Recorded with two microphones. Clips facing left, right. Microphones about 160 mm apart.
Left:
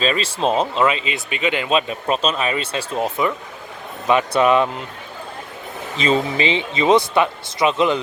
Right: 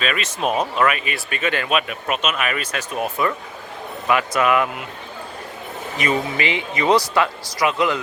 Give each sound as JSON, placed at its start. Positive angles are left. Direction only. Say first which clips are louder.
{"t": 0.0, "sound": "speech", "louder": "left 3 dB", "side_deg": 30}
{"t": 4.4, "sound": "speech", "louder": "left 3 dB", "side_deg": 25}
{"t": 6.0, "sound": "speech", "louder": "left 3 dB", "side_deg": 25}